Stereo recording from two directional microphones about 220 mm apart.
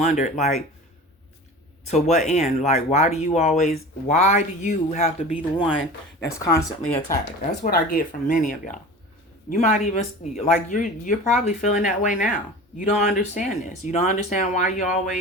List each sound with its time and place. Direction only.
0.0 s speech: 30° left (ahead or behind)
1.9 s speech: 30° left (ahead or behind)
6.1 s speech: 15° left (ahead or behind)
7.6 s speech: 40° left (ahead or behind)